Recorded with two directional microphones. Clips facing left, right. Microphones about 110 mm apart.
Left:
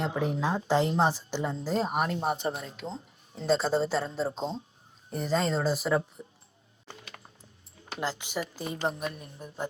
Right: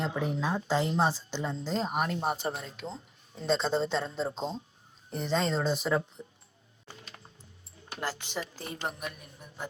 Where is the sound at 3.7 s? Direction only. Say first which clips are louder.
Left 2 dB; 5° left (ahead or behind).